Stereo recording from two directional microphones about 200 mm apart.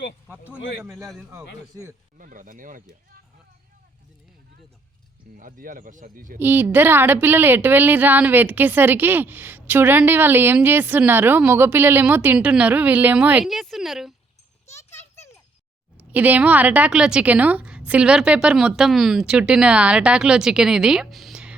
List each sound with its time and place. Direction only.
1.3 s a woman's voice: 15° right (ahead or behind)
2.1 s speech: 40° right (ahead or behind)
5.4 s a man's voice: 45° right (ahead or behind)
6.4 s a woman's voice: 10° right (ahead or behind)
14.9 s a sound: 15° left (ahead or behind)
16.0 s a woman's voice: 10° right (ahead or behind)